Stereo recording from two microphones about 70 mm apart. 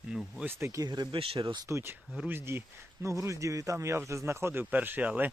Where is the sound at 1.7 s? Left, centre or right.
Right.